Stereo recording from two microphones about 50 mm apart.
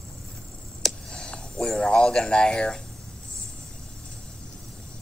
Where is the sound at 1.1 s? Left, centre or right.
Centre.